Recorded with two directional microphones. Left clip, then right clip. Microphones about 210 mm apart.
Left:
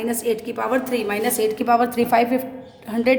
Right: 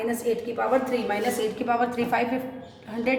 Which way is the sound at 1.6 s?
50° left (ahead or behind).